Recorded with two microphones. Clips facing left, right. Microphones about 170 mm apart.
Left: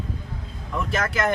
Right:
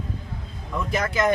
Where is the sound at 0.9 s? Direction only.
15° right (ahead or behind).